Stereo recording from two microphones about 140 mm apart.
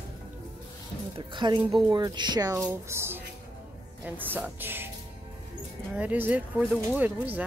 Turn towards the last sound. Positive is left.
turn(degrees=-10)  # may be behind; listen again after turning